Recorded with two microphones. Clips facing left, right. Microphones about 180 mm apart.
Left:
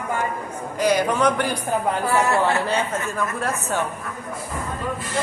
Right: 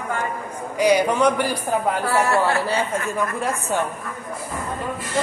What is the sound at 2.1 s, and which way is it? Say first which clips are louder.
Speech: even; 20° left (ahead or behind).